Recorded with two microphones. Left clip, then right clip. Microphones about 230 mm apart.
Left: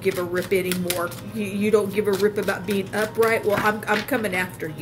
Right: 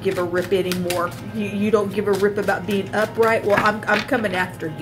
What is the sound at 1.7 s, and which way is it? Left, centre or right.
Speech, left.